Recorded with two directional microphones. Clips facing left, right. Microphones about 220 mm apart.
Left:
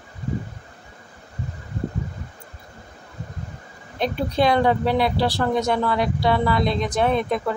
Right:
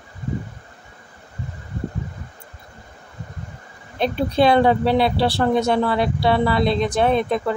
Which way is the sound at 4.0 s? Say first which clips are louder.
Right 3 dB; 30° right (ahead or behind).